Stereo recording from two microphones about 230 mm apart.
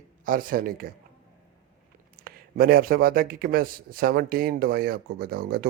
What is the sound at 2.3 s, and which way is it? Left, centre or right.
Speech, right.